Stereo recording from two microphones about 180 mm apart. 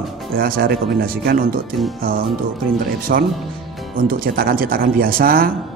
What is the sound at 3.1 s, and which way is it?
Speech, 55° right (ahead or behind).